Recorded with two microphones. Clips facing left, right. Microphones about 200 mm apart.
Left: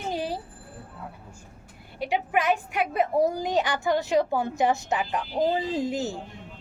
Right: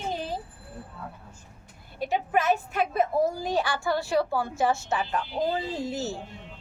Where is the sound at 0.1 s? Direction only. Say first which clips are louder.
Left 4 dB; 10° left (ahead or behind).